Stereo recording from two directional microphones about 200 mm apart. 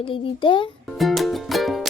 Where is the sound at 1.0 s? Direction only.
Centre (ahead or behind).